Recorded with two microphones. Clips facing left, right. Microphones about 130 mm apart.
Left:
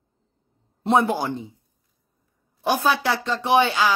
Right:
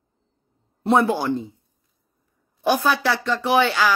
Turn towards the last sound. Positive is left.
turn(degrees=20)  # may be behind; listen again after turning